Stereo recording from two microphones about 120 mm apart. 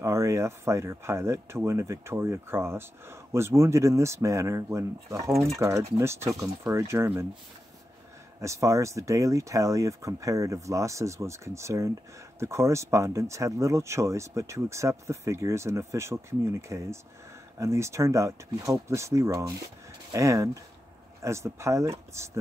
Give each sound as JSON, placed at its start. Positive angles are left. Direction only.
{"t": 0.0, "sound": "speech", "side_deg": -25}
{"t": 8.4, "sound": "speech", "side_deg": -25}